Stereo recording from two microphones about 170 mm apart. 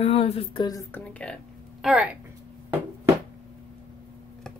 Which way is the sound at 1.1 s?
5° left (ahead or behind).